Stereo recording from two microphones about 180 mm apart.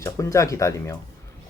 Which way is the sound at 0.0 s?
15° left (ahead or behind).